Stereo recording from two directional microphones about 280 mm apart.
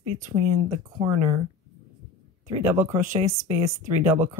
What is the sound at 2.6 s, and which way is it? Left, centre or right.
Speech, centre.